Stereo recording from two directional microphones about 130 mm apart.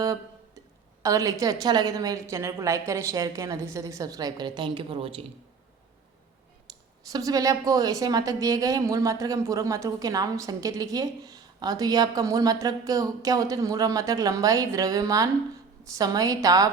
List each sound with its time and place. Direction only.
0.0 s guitar: 30° right (ahead or behind)
1.0 s a woman's voice: 25° right (ahead or behind); by 5.2 s 45° right (ahead or behind)
6.7 s clicking: 35° right (ahead or behind)
7.1 s a woman's voice: 30° right (ahead or behind)